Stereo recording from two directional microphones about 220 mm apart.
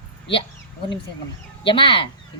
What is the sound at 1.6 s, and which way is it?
Speech, 25° left (ahead or behind).